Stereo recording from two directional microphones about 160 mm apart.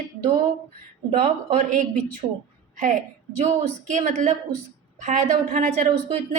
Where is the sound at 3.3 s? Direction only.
50° right (ahead or behind).